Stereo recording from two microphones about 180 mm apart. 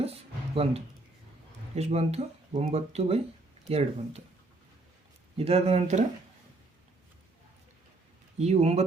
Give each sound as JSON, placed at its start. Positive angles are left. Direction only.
{"t": 0.0, "sound": "a sound", "side_deg": -35}
{"t": 1.7, "sound": "speech", "side_deg": -35}
{"t": 5.4, "sound": "speech", "side_deg": -35}
{"t": 8.4, "sound": "speech", "side_deg": -35}